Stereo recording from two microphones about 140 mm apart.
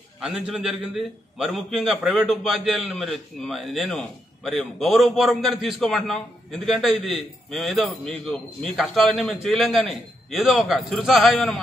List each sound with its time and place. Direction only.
0.2 s a man's voice: 5° right (ahead or behind)